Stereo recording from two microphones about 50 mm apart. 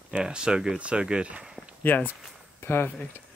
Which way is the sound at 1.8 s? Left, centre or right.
Left.